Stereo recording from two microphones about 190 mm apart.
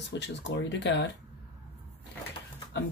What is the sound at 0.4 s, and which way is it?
Speech, 65° left (ahead or behind).